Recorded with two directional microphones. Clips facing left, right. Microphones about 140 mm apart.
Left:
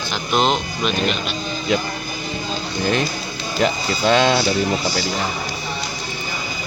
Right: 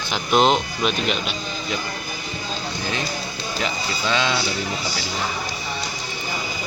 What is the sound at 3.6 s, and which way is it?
Speech, 55° left (ahead or behind).